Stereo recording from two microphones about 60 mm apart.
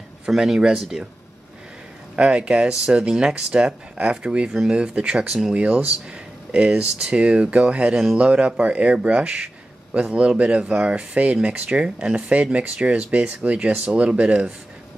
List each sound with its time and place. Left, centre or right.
0.3 s speech: centre
2.1 s speech: centre
5.6 s speech: right